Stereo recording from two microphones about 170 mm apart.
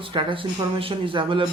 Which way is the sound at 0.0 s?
30° right (ahead or behind).